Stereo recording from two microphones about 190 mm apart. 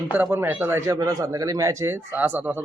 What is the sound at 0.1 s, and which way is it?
Speech, 10° right (ahead or behind).